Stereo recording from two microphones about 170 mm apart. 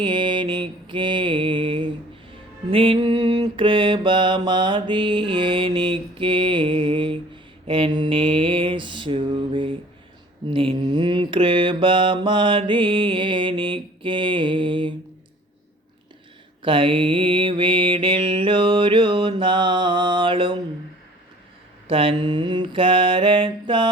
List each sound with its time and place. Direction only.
0.0 s mantra: 25° right (ahead or behind)
16.6 s mantra: 30° right (ahead or behind)
21.8 s mantra: 30° right (ahead or behind)